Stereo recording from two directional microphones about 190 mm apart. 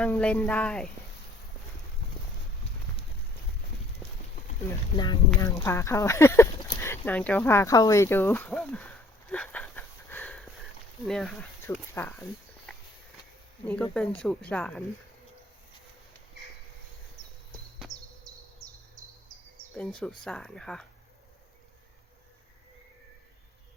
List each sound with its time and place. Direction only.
0.0 s speech: 5° left (ahead or behind)
4.9 s speech: 20° left (ahead or behind); by 8.8 s centre (ahead or behind)
8.8 s sniff: 5° left (ahead or behind)
11.0 s speech: centre (ahead or behind)
11.6 s speech: 15° left (ahead or behind)
13.7 s speech: 5° left (ahead or behind)
19.7 s speech: 5° left (ahead or behind)